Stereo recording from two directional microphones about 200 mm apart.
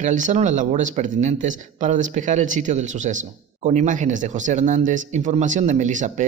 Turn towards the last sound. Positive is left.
turn(degrees=-40)  # may be behind; listen again after turning